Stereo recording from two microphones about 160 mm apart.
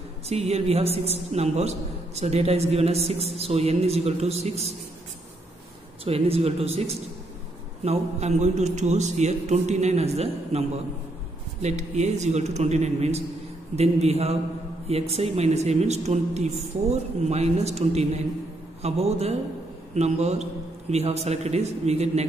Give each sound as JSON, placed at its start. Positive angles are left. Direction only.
{"t": 0.3, "sound": "a man's voice", "side_deg": -40}
{"t": 6.0, "sound": "a man's voice", "side_deg": -40}
{"t": 11.6, "sound": "a man's voice", "side_deg": -45}